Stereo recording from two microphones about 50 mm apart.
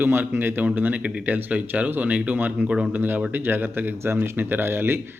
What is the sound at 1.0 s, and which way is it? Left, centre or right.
Speech, right.